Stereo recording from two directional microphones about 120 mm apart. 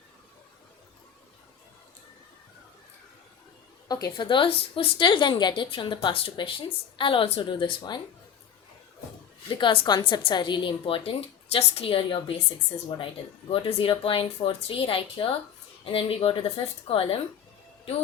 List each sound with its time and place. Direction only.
3.8 s a woman's voice: 30° left (ahead or behind)
9.5 s a woman's voice: 45° left (ahead or behind)
13.5 s a woman's voice: 50° left (ahead or behind)